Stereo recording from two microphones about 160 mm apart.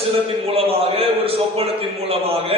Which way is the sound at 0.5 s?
35° right (ahead or behind).